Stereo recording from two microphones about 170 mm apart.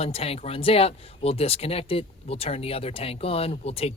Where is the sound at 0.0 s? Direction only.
35° left (ahead or behind).